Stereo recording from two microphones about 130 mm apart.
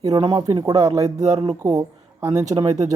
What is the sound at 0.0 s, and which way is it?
Speech, 30° right (ahead or behind).